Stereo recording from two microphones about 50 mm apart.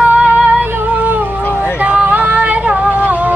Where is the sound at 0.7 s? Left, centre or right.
Right.